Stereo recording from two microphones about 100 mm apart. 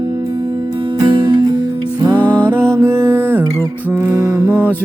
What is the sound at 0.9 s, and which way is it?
Music, 50° right (ahead or behind).